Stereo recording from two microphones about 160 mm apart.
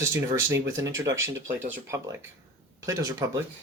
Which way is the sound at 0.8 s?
20° right (ahead or behind).